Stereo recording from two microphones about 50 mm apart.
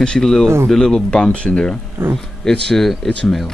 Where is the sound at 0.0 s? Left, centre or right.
Centre.